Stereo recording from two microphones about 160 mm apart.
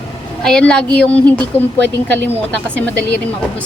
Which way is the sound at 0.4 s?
5° left (ahead or behind).